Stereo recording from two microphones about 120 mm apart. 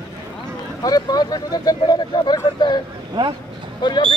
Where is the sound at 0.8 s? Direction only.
35° left (ahead or behind).